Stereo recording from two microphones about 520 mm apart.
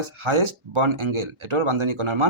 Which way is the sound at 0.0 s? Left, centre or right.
Right.